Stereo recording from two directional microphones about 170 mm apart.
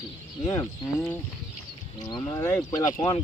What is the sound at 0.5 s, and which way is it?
Speech, 20° left (ahead or behind).